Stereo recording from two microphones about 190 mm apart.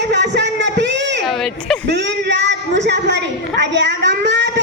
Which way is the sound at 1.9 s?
65° right (ahead or behind).